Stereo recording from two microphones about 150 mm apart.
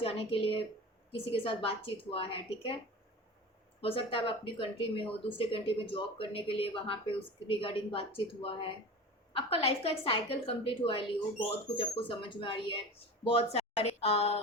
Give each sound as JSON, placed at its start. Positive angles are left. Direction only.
{"t": 0.0, "sound": "speech", "side_deg": 40}
{"t": 3.8, "sound": "speech", "side_deg": 40}